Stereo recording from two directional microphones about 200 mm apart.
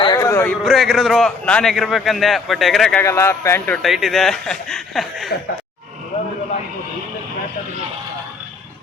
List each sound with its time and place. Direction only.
0.0 s a sound: 15° left (ahead or behind)
0.6 s a man's voice: centre (ahead or behind)
3.0 s speech: 15° left (ahead or behind)
3.8 s a man's voice: centre (ahead or behind)